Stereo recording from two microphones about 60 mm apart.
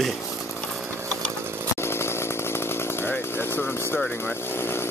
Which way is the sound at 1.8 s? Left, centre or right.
Left.